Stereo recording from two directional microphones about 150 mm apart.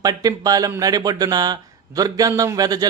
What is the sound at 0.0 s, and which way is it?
Speech, 25° right (ahead or behind).